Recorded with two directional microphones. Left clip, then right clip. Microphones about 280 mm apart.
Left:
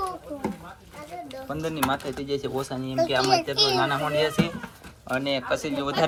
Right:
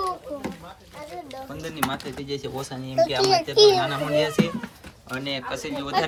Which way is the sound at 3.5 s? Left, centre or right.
Right.